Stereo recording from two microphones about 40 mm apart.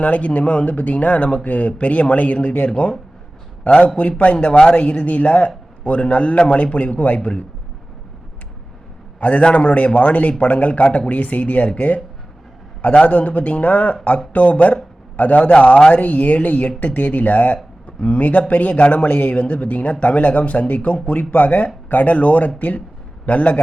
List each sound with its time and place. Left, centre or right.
0.0 s a man's voice: left
9.2 s speech: left
12.8 s speech: left